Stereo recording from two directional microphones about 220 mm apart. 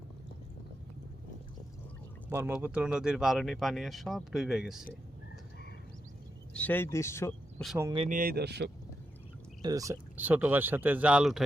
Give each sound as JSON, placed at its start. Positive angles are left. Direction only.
{"t": 2.3, "sound": "speech", "side_deg": -10}
{"t": 6.5, "sound": "speech", "side_deg": 5}
{"t": 7.9, "sound": "speech", "side_deg": -35}
{"t": 9.6, "sound": "speech", "side_deg": -15}